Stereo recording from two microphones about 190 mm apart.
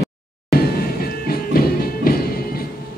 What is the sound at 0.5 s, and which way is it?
Music, 50° left (ahead or behind).